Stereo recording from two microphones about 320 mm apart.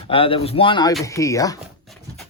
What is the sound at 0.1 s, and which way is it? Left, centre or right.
Speech, centre.